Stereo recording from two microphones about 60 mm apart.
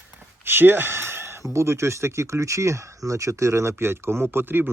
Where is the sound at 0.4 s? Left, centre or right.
Right.